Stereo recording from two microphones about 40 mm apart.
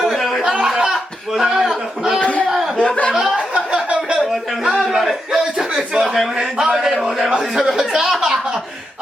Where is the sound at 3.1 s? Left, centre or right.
Centre.